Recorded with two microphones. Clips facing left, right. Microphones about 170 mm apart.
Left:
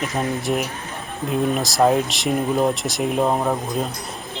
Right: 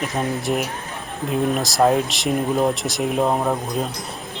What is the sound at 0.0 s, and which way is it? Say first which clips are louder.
Speech: even; centre (ahead or behind).